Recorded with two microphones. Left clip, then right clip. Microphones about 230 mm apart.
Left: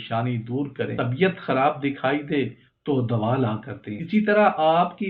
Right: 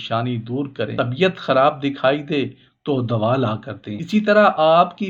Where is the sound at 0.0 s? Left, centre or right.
Right.